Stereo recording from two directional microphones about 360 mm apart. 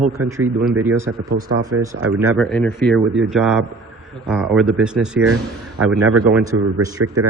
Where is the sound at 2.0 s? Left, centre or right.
Right.